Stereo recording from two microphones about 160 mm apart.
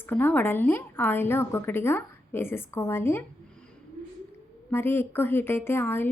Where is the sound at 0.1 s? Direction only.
10° left (ahead or behind).